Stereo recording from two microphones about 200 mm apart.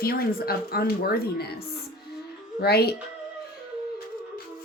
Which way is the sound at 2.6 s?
55° left (ahead or behind).